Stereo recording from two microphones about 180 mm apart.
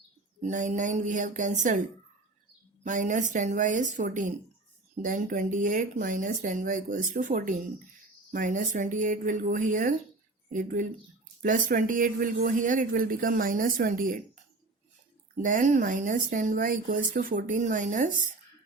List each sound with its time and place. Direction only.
0.4 s speech: 40° right (ahead or behind)
2.8 s speech: 45° right (ahead or behind)
15.4 s speech: 45° right (ahead or behind)